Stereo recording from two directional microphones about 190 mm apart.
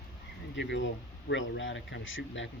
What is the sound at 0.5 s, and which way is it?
Speech, 70° left (ahead or behind).